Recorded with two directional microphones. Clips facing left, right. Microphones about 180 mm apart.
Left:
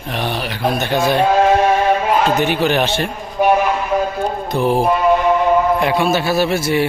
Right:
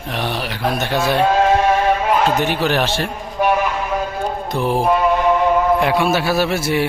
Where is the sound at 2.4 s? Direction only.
Centre (ahead or behind).